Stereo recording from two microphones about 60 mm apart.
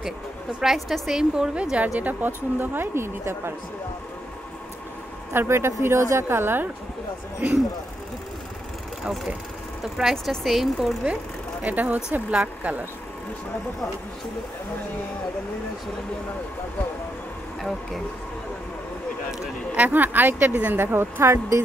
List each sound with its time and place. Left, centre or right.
0.6 s speech: centre
1.3 s a woman's voice: centre
2.0 s speech: right
5.3 s a woman's voice: right
10.1 s speech: centre
11.6 s speech: right
17.6 s speech: centre
19.7 s speech: right